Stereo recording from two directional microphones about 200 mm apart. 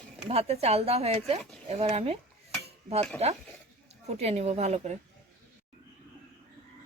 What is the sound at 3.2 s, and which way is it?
Speech, 30° right (ahead or behind).